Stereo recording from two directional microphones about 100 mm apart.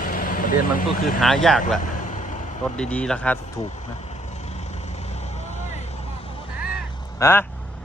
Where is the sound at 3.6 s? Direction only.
90° left.